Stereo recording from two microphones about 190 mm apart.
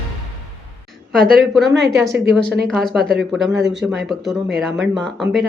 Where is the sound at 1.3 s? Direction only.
Centre (ahead or behind).